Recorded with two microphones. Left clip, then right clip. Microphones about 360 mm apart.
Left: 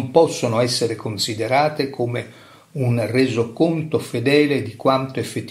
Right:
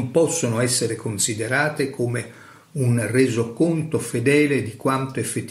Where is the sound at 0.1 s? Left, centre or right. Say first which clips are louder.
Left 4 dB; centre.